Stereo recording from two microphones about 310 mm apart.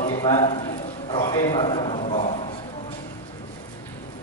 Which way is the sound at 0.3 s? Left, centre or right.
Centre.